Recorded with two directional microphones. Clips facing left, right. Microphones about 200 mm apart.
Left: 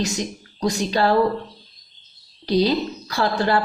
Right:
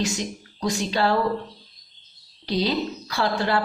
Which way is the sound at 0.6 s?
40° left (ahead or behind).